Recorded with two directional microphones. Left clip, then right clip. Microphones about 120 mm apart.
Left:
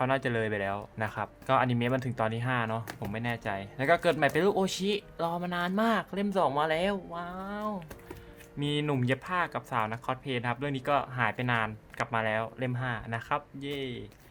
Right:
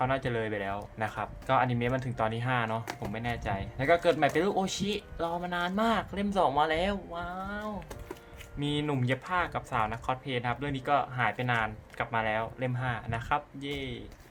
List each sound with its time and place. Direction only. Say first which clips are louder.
0.0 s speech: left 1 dB; 65° left (ahead or behind)
8.5 s speech: left 1 dB; 65° left (ahead or behind)